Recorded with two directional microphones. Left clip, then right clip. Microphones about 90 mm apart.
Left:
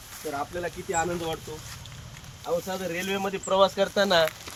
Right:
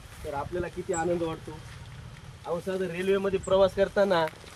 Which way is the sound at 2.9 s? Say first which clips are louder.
Right 3 dB; 25° right (ahead or behind).